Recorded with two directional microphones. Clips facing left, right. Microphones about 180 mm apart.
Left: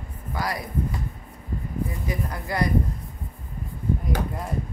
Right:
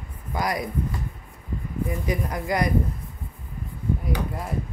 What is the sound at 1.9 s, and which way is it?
Speech, 20° right (ahead or behind).